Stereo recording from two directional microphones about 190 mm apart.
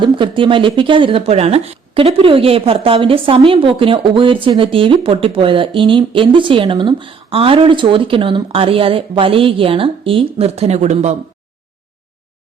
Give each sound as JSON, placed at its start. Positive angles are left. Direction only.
{"t": 0.0, "sound": "speech", "side_deg": -25}